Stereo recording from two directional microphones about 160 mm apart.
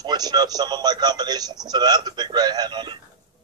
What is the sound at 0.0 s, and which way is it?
Speech, 25° right (ahead or behind).